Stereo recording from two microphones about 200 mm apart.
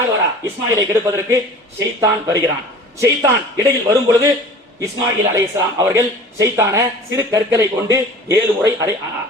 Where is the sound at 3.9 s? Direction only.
15° right (ahead or behind).